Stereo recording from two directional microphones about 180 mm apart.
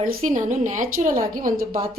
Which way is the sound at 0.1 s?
45° right (ahead or behind).